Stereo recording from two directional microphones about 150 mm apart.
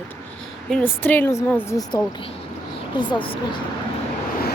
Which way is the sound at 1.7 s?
25° left (ahead or behind).